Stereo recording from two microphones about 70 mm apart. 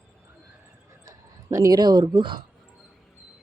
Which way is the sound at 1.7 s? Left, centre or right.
Right.